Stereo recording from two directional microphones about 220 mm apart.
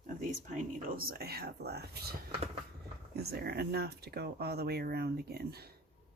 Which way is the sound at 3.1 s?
45° right (ahead or behind).